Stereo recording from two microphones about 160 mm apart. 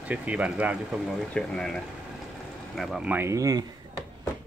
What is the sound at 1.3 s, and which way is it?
Speech, 5° left (ahead or behind).